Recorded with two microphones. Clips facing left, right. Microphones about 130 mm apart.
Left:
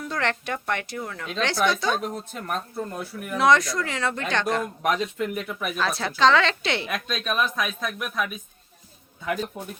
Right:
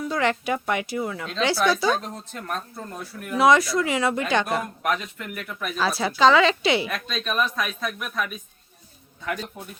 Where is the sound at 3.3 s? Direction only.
5° right (ahead or behind).